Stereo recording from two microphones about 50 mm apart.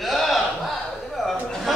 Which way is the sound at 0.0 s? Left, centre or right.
Centre.